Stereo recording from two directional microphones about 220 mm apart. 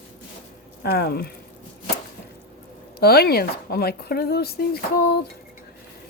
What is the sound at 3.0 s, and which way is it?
Speech, 45° left (ahead or behind).